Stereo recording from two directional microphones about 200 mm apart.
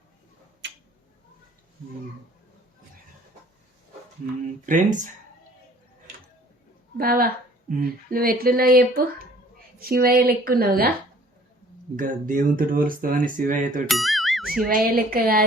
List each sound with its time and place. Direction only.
0.6 s tick-tock: 60° right (ahead or behind)
4.6 s speech: 40° right (ahead or behind)
6.9 s speech: 50° right (ahead or behind)
11.9 s speech: 40° right (ahead or behind)
13.8 s speech: centre (ahead or behind)
14.7 s speech: 45° right (ahead or behind)